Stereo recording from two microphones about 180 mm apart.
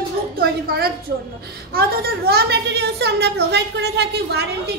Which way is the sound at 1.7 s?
60° right (ahead or behind).